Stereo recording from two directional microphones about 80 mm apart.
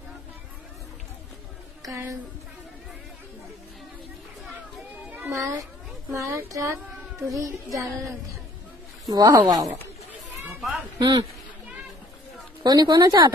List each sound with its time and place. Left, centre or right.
6.1 s speech: right
9.0 s speech: right
10.6 s a sound: centre
11.0 s a woman's voice: right
12.6 s a woman's voice: right